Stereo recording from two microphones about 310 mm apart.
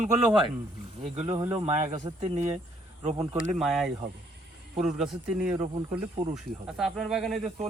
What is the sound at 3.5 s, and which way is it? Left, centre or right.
Speech, centre.